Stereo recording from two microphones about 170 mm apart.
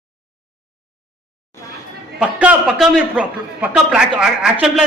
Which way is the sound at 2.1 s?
5° right (ahead or behind).